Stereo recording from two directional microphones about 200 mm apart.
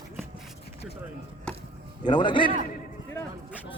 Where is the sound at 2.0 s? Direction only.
20° left (ahead or behind).